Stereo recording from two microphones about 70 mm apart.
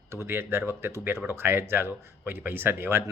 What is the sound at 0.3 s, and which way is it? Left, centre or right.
A man's voice, right.